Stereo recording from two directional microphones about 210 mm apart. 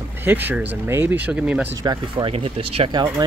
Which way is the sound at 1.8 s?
20° right (ahead or behind).